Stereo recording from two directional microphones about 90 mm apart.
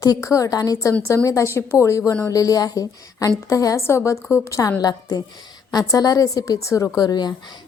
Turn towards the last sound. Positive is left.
turn(degrees=50)  # may be behind; listen again after turning